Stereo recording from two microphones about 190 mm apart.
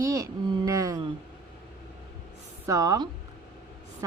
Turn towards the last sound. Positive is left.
turn(degrees=-20)  # may be behind; listen again after turning